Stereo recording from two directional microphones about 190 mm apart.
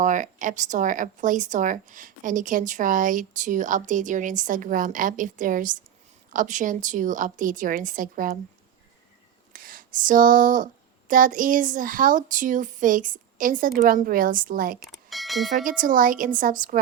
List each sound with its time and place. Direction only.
0.0 s a woman's voice: 40° right (ahead or behind)
9.5 s a sound: 45° right (ahead or behind)
11.1 s a woman's voice: 45° right (ahead or behind)
15.1 s bell: centre (ahead or behind)
15.8 s a woman's voice: 45° right (ahead or behind)